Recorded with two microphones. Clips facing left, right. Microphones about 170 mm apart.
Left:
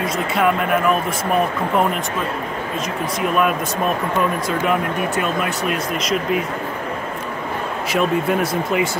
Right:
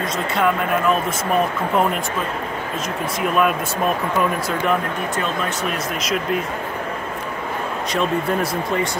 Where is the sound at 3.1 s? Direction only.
Centre (ahead or behind).